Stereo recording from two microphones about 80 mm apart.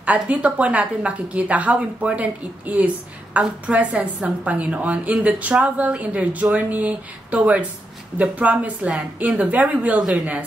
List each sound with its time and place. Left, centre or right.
0.0 s a woman's voice: centre